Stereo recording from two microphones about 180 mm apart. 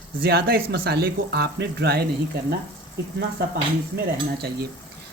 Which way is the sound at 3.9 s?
60° right (ahead or behind).